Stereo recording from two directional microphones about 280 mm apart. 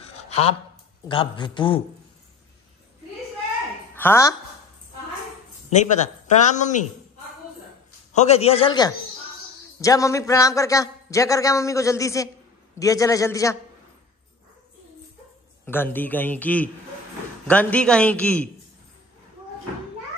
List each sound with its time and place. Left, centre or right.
0.3 s a sound: left
1.0 s a man's voice: centre
3.9 s speech: centre
5.7 s speech: left
8.1 s a man's voice: left
15.6 s a man's voice: centre